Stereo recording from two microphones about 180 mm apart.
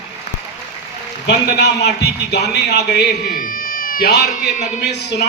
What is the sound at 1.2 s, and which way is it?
A man's voice, 70° left (ahead or behind).